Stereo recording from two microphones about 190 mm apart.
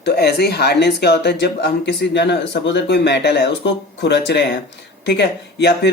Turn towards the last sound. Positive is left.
turn(degrees=60)  # may be behind; listen again after turning